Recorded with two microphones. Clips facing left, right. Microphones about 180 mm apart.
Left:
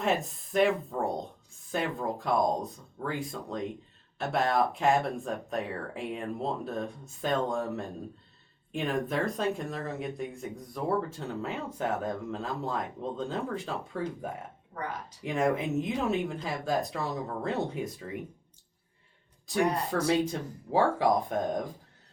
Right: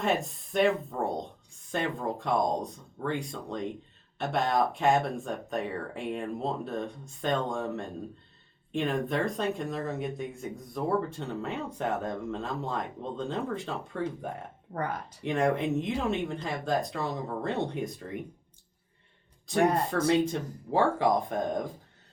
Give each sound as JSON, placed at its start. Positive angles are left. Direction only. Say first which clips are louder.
{"t": 0.0, "sound": "speech", "louder": "even", "side_deg": 0}
{"t": 14.7, "sound": "speech", "louder": "right 5 dB", "side_deg": -55}
{"t": 15.2, "sound": "speech", "louder": "right 1 dB", "side_deg": 0}
{"t": 20.1, "sound": "speech", "louder": "right 2 dB", "side_deg": 0}